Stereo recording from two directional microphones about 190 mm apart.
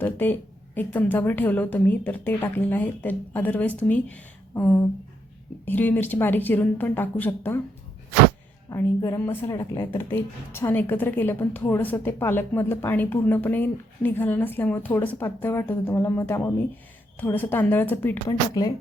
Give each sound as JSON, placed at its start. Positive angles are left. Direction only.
{"t": 0.0, "sound": "a woman's voice", "side_deg": 10}
{"t": 8.7, "sound": "a woman's voice", "side_deg": 20}